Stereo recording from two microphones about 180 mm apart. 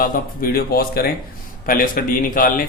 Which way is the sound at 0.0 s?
55° left (ahead or behind).